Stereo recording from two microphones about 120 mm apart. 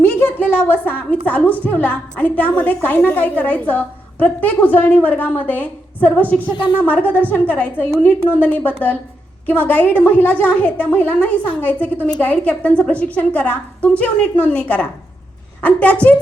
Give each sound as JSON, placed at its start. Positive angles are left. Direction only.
{"t": 0.0, "sound": "a woman's voice", "side_deg": 15}
{"t": 6.5, "sound": "speech", "side_deg": 40}
{"t": 6.8, "sound": "a woman's voice", "side_deg": 15}